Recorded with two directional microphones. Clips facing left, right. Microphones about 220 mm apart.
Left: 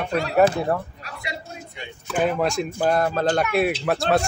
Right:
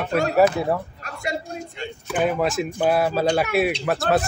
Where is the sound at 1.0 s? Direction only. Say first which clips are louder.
Right 6 dB; 45° right (ahead or behind).